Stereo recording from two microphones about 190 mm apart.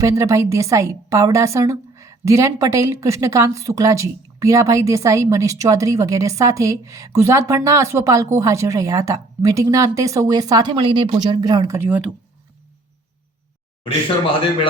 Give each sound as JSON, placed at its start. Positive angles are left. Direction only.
{"t": 0.0, "sound": "a woman's voice", "side_deg": -15}